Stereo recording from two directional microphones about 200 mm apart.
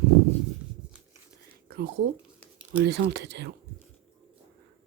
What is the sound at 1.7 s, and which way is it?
A woman's voice, 50° right (ahead or behind).